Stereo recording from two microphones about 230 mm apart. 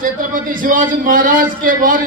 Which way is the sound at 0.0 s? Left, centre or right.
Right.